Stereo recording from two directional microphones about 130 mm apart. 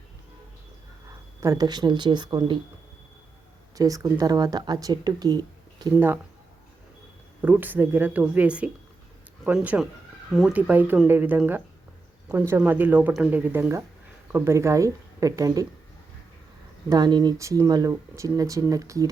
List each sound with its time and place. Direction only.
1.4 s speech: 30° right (ahead or behind)
3.8 s speech: 25° right (ahead or behind)
5.9 s speech: 15° right (ahead or behind)
7.4 s speech: 15° right (ahead or behind)
16.9 s speech: 35° right (ahead or behind)